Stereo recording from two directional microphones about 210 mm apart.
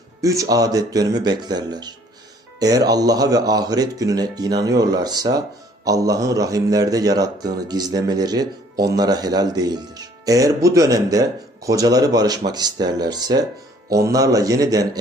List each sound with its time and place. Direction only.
0.2 s speech: 15° right (ahead or behind)